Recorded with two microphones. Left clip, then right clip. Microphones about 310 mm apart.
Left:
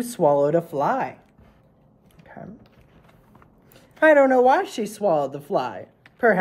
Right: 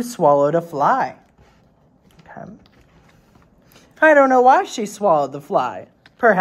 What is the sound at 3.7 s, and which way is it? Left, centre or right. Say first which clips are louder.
Speech: right 3 dB; centre.